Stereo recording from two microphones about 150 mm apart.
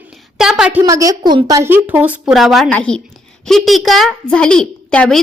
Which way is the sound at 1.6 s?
15° right (ahead or behind).